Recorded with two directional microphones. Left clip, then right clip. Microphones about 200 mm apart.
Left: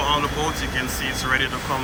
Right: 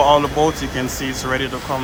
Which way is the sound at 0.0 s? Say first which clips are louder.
Right 8 dB; 35° right (ahead or behind).